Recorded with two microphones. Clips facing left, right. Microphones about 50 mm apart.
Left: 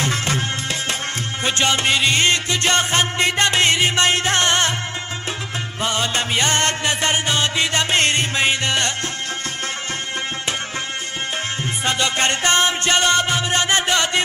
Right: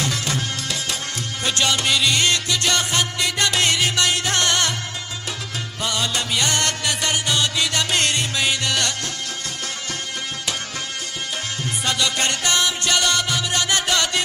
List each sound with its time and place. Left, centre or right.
0.0 s music: left
5.8 s music: left
11.8 s music: left